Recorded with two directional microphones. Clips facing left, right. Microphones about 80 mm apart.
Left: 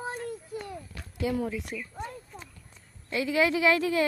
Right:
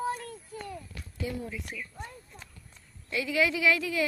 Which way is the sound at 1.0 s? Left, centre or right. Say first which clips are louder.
Left 7 dB; left.